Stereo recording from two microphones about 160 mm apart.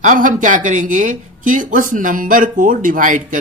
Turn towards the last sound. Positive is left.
turn(degrees=-55)  # may be behind; listen again after turning